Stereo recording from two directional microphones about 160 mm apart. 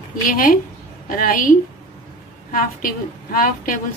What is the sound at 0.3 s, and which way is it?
A woman's voice, 60° left (ahead or behind).